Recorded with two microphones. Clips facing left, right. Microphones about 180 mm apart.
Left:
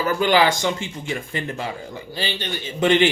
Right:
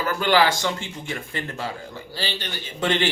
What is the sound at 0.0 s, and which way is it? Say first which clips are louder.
Speech: left 2 dB; 15° left (ahead or behind).